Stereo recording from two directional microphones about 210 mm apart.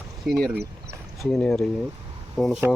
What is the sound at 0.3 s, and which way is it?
Speech, 5° left (ahead or behind).